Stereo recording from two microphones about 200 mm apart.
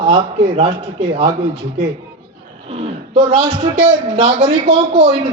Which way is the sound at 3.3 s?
30° right (ahead or behind).